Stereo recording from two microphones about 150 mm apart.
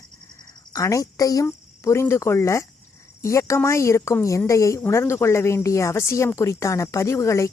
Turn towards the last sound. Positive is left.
turn(degrees=20)  # may be behind; listen again after turning